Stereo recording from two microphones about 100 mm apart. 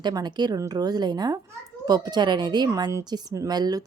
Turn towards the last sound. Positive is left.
turn(degrees=-40)  # may be behind; listen again after turning